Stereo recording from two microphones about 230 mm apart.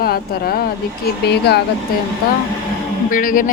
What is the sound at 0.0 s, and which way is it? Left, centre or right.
Speech, left.